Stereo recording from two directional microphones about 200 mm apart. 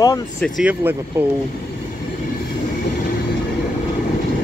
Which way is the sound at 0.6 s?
10° right (ahead or behind).